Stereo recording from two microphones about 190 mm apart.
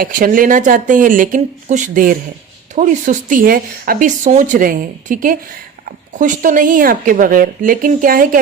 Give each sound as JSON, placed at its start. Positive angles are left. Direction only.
{"t": 0.0, "sound": "speech", "side_deg": -45}